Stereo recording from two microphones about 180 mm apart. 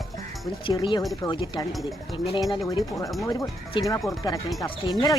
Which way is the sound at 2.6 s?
20° left (ahead or behind).